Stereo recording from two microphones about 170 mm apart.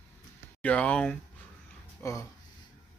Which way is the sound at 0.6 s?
5° left (ahead or behind).